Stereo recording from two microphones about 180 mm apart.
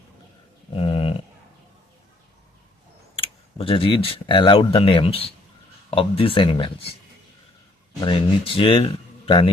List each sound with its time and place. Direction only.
0.8 s a sound: 30° left (ahead or behind)
3.2 s speech: 30° left (ahead or behind)
8.0 s speech: 30° left (ahead or behind)